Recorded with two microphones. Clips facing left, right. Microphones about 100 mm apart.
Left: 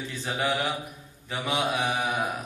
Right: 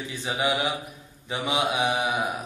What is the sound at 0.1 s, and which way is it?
Speech, 15° right (ahead or behind).